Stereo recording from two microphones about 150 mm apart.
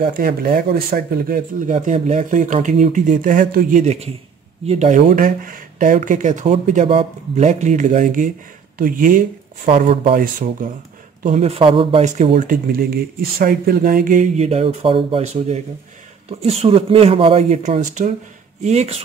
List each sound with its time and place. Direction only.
0.0 s speech: 75° right (ahead or behind); by 5.0 s 55° right (ahead or behind)
5.1 s speech: 70° right (ahead or behind)
9.7 s speech: 40° right (ahead or behind)
10.1 s speech: 65° right (ahead or behind)
11.2 s speech: 45° right (ahead or behind)
12.4 s speech: 70° right (ahead or behind); by 18.9 s 45° right (ahead or behind)